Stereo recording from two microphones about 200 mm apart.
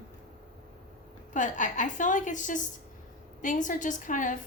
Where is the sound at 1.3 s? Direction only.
40° left (ahead or behind).